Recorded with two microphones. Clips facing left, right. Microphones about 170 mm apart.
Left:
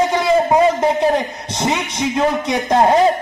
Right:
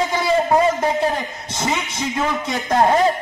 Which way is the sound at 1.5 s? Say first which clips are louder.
Left 3 dB; 20° left (ahead or behind).